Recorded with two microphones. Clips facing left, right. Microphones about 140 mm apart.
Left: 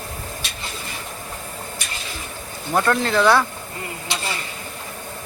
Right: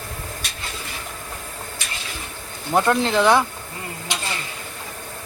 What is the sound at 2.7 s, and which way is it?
Speech, 20° right (ahead or behind).